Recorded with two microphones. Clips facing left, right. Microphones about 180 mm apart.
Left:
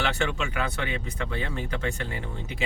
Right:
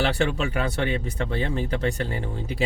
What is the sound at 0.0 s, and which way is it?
Speech, 35° right (ahead or behind).